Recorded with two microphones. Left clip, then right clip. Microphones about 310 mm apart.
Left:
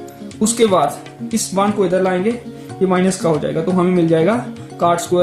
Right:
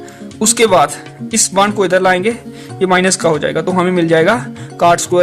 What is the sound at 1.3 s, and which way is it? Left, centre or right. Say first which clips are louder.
Speech: right 5 dB; right.